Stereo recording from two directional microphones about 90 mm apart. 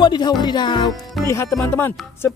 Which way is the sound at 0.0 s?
55° left (ahead or behind).